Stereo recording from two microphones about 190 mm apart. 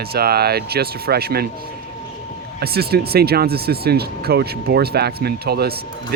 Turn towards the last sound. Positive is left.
turn(degrees=-55)  # may be behind; listen again after turning